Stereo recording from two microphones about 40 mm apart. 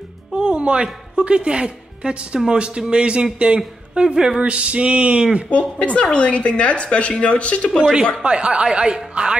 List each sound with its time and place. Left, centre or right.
0.4 s music: right
1.1 s a man's voice: right
5.5 s speech: left
8.2 s speech: right